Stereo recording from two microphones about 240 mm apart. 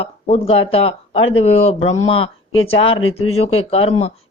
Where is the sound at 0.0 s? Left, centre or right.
Left.